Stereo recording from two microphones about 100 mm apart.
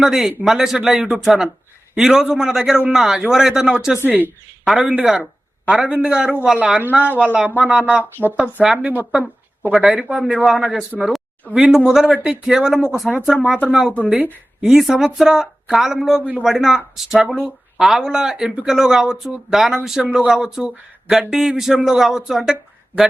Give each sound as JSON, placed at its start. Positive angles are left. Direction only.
{"t": 0.0, "sound": "a man's voice", "side_deg": -5}
{"t": 4.0, "sound": "a man's voice", "side_deg": -15}
{"t": 4.6, "sound": "a man's voice", "side_deg": 0}